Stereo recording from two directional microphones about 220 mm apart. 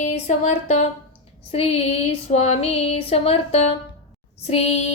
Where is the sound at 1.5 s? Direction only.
25° left (ahead or behind).